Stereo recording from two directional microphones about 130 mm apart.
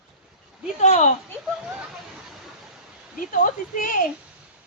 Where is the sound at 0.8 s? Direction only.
60° left (ahead or behind).